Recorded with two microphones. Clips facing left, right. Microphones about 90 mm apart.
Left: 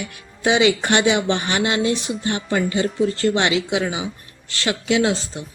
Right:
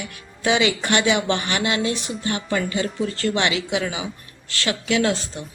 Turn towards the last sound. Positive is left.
turn(degrees=25)  # may be behind; listen again after turning